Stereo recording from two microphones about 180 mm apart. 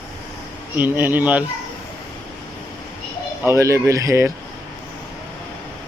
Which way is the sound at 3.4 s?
15° right (ahead or behind).